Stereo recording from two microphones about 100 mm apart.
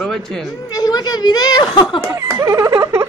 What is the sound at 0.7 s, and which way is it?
A woman's voice, 40° left (ahead or behind).